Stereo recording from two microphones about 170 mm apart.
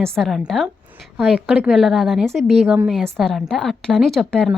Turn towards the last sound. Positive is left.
turn(degrees=5)  # may be behind; listen again after turning